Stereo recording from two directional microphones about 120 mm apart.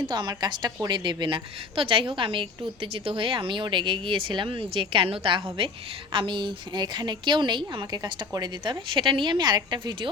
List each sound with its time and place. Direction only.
0.1 s a woman's voice: 40° right (ahead or behind)